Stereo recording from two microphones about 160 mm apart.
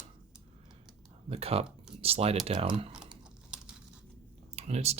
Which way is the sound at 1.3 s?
40° right (ahead or behind).